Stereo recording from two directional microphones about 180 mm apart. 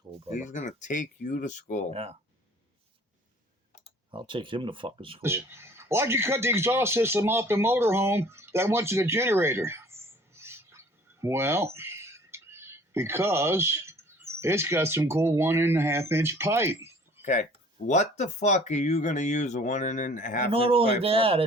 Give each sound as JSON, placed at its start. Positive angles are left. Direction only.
{"t": 0.4, "sound": "speech", "side_deg": 45}
{"t": 1.9, "sound": "speech", "side_deg": -35}
{"t": 4.1, "sound": "speech", "side_deg": -25}
{"t": 5.2, "sound": "speech", "side_deg": -15}
{"t": 17.8, "sound": "speech", "side_deg": 40}
{"t": 20.5, "sound": "speech", "side_deg": -30}